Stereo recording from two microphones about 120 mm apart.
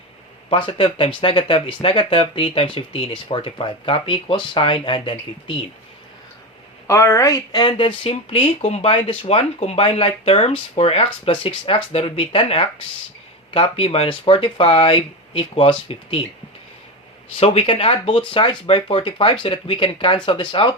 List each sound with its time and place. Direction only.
0.5 s speech: 45° left (ahead or behind)
6.8 s speech: 25° left (ahead or behind); by 16.2 s 50° left (ahead or behind)
17.3 s speech: 55° left (ahead or behind)